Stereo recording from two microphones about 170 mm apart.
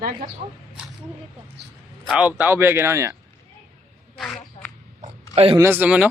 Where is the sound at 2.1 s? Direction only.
10° right (ahead or behind).